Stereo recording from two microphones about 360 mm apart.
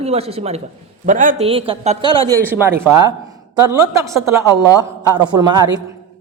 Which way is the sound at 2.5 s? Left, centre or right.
Centre.